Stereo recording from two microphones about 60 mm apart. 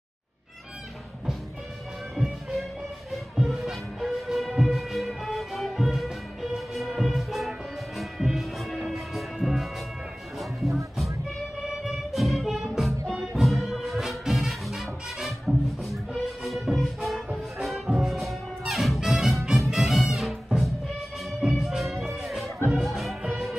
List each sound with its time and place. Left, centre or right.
3.3 s music: centre
11.8 s music: centre